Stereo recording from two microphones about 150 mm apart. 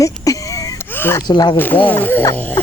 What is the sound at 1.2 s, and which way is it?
Speech, 30° left (ahead or behind).